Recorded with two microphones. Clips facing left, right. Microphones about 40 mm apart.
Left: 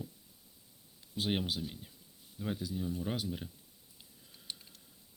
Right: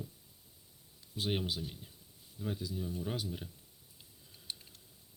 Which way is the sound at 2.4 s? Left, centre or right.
Left.